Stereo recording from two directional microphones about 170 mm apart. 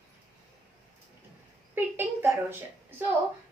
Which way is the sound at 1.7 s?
10° right (ahead or behind).